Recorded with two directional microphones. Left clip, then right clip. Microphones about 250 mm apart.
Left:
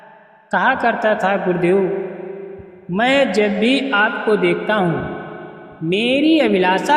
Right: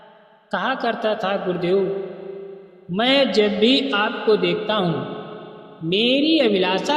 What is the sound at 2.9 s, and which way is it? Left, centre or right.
A man's voice, left.